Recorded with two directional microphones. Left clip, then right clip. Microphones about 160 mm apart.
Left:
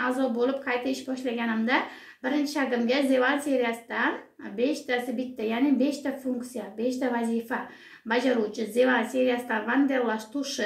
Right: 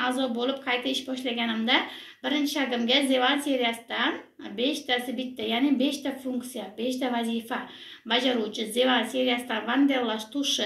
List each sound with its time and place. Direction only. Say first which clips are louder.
0.0 s speech: left 1 dB; 50° left (ahead or behind)